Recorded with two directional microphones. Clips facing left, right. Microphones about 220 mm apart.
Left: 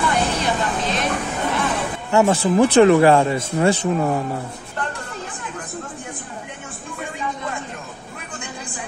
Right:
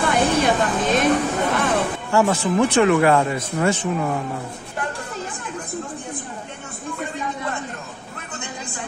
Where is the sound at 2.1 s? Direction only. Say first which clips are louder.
Left 3 dB; 30° left (ahead or behind).